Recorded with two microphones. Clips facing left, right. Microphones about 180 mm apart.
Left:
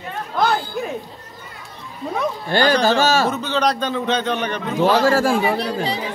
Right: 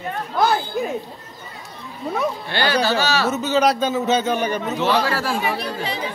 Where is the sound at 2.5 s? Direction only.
45° left (ahead or behind).